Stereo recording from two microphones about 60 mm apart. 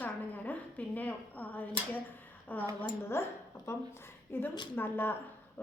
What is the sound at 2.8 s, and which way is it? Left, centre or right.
A woman's voice, left.